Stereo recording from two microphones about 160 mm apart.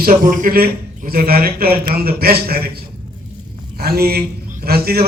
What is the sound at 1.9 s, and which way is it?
Speech, 70° right (ahead or behind).